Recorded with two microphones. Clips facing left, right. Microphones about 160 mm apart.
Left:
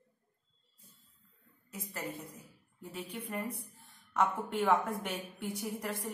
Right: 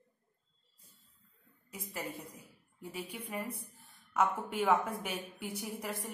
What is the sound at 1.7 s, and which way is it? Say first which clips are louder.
A woman's voice: left 1 dB; 10° right (ahead or behind).